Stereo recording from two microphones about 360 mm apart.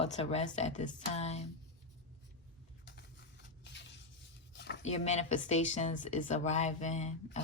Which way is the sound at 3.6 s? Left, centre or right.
Left.